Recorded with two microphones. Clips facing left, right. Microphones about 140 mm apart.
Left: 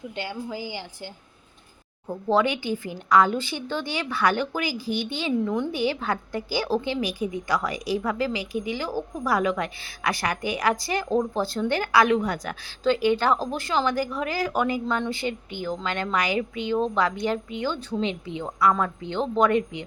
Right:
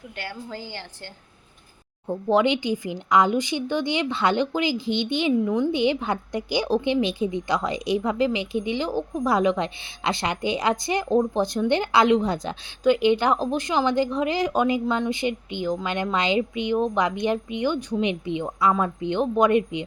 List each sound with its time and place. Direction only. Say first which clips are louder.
0.2 s a woman's voice: left 2 dB; 15° left (ahead or behind)
2.0 s a woman's voice: right 2 dB; 20° right (ahead or behind)